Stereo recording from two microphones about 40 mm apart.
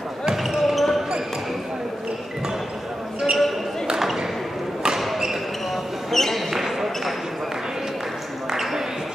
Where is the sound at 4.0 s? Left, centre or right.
Centre.